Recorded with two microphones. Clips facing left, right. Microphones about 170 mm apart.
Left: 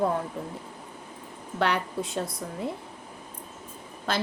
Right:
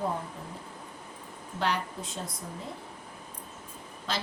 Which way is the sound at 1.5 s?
60° left (ahead or behind).